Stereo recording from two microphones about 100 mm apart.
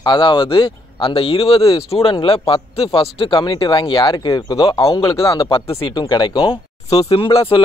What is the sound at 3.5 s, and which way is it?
Speech, 50° left (ahead or behind).